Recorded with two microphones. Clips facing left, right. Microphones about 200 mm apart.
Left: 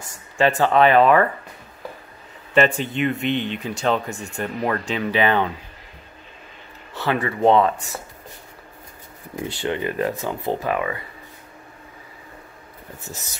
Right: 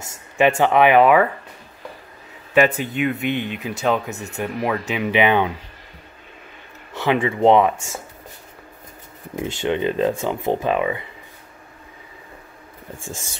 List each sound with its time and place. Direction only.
0.1 s a sound: 25° right (ahead or behind)
0.7 s speech: 15° right (ahead or behind)
2.7 s speech: 5° right (ahead or behind)
6.9 s speech: 15° right (ahead or behind)
9.4 s speech: 20° right (ahead or behind)